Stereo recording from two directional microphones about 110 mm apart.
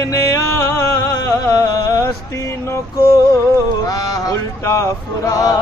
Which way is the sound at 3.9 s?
35° left (ahead or behind).